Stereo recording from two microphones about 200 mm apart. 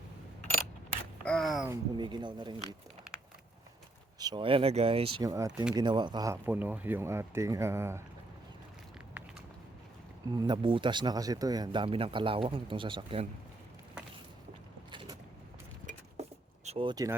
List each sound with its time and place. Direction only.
1.2 s speech: 5° left (ahead or behind)
1.7 s speech: 20° right (ahead or behind)
4.2 s speech: 20° right (ahead or behind)
10.3 s speech: 20° right (ahead or behind)
14.9 s a sound: 20° right (ahead or behind)
16.2 s keys jangling: 30° right (ahead or behind)
16.6 s speech: 25° right (ahead or behind)